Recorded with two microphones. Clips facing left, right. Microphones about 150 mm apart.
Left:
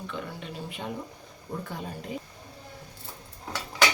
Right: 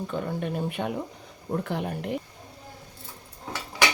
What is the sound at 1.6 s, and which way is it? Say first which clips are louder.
Speech: right 7 dB; 65° right (ahead or behind).